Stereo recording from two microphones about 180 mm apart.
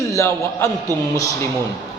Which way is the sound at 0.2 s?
15° left (ahead or behind).